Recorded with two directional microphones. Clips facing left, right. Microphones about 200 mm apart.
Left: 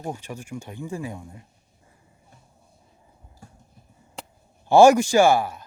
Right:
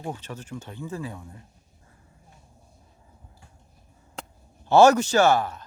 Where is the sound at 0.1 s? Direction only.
10° left (ahead or behind).